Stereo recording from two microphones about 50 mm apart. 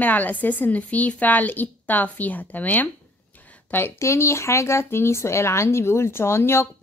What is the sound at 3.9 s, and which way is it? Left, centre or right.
Speech, left.